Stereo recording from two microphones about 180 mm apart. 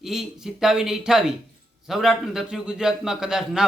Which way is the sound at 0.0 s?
Centre (ahead or behind).